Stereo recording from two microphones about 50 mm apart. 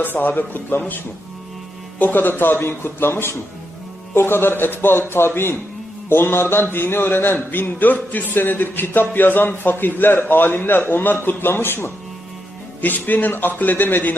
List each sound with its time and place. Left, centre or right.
0.0 s speech: left
2.0 s speech: left
12.8 s a man's voice: left